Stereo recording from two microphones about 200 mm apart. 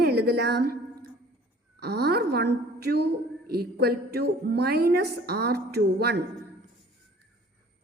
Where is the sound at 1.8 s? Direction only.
55° right (ahead or behind).